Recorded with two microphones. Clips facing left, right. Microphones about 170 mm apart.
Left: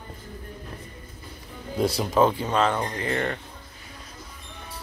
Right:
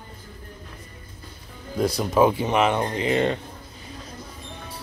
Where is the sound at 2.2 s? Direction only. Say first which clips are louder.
Right 3 dB; 20° right (ahead or behind).